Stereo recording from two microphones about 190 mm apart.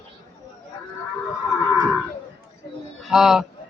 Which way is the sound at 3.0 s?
Centre (ahead or behind).